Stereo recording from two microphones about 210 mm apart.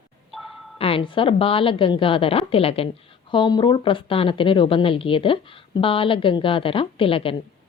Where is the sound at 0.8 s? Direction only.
25° left (ahead or behind).